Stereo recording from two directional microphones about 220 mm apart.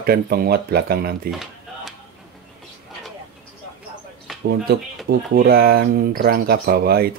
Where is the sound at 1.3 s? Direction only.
Centre (ahead or behind).